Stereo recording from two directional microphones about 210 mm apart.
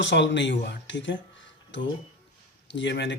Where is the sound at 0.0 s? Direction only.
60° left (ahead or behind).